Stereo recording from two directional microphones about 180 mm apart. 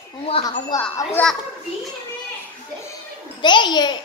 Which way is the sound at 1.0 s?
15° left (ahead or behind).